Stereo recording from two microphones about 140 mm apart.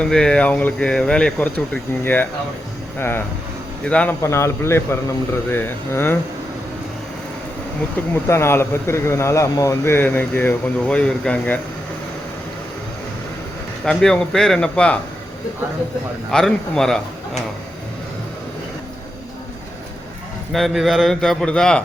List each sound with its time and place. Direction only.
0.0 s speech: 5° left (ahead or behind)
4.2 s speech: 20° left (ahead or behind)
8.1 s speech: 20° left (ahead or behind)
13.8 s a man's voice: 5° left (ahead or behind)
16.3 s a man's voice: 5° left (ahead or behind)
20.5 s a man's voice: centre (ahead or behind)